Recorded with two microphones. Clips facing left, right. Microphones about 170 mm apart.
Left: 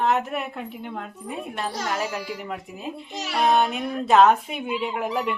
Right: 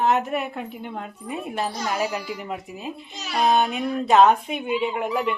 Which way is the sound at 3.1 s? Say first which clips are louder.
Left 4 dB; 75° left (ahead or behind).